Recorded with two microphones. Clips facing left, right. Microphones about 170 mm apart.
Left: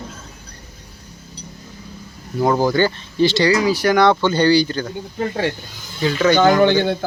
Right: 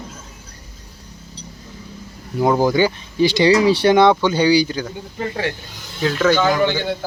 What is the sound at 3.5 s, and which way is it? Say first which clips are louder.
Speech: right 3 dB; 30° right (ahead or behind).